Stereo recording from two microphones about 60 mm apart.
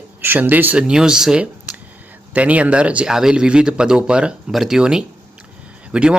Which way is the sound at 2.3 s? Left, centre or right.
Right.